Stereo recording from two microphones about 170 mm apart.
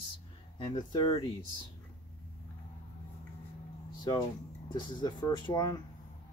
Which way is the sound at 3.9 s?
25° left (ahead or behind).